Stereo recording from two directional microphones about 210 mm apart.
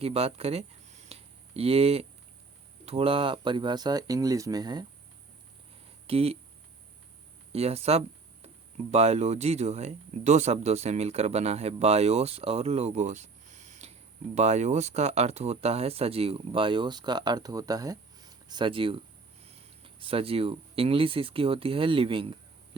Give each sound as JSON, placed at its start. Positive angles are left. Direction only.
{"t": 0.0, "sound": "a sound", "side_deg": -30}
{"t": 2.8, "sound": "speech", "side_deg": -25}
{"t": 6.1, "sound": "speech", "side_deg": -30}
{"t": 7.5, "sound": "speech", "side_deg": -30}